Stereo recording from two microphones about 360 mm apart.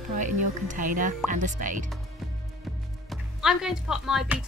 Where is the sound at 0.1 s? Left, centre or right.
Right.